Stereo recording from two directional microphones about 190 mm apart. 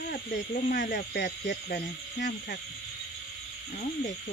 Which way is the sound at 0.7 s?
55° left (ahead or behind).